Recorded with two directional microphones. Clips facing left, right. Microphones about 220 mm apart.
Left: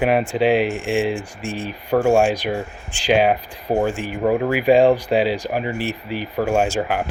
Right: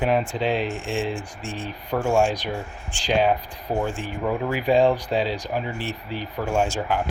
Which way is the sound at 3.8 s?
10° left (ahead or behind).